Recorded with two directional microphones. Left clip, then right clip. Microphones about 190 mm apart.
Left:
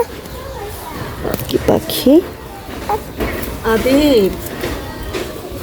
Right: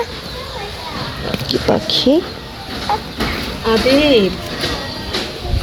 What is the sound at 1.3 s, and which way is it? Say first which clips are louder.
Speech: left 1 dB; 25° left (ahead or behind).